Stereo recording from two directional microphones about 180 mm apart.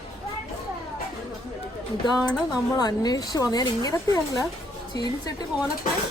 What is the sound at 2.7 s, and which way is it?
A woman's voice, 20° left (ahead or behind).